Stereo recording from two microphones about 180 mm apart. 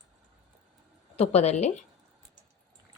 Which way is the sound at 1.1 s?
35° left (ahead or behind).